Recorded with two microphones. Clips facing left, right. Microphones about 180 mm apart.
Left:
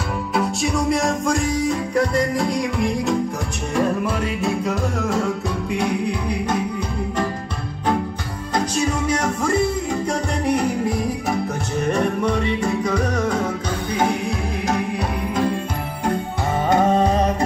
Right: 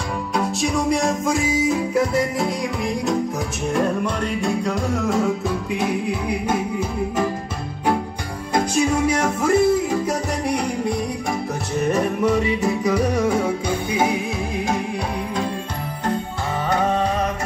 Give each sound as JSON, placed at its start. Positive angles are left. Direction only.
{"t": 0.3, "sound": "music", "side_deg": 0}
{"t": 9.4, "sound": "music", "side_deg": -5}
{"t": 16.6, "sound": "music", "side_deg": 25}